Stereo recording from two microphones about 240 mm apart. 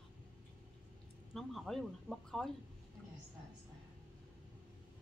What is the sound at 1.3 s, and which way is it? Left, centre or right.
Speech, centre.